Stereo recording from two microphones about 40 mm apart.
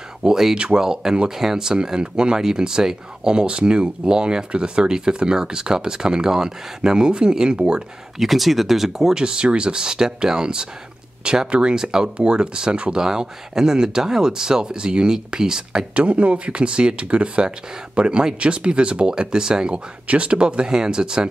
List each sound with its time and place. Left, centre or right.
0.2 s speech: centre
8.2 s speech: centre
15.9 s speech: right